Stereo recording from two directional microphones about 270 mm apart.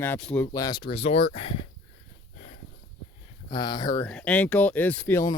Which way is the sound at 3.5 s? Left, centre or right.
Centre.